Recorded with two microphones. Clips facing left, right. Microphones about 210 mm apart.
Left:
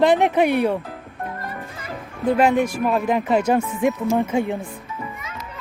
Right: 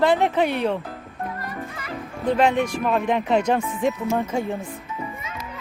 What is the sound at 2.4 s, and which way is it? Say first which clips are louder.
Speech: left 2 dB; 5° left (ahead or behind).